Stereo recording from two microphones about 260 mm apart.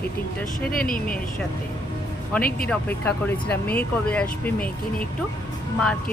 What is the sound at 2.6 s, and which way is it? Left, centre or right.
Speech, centre.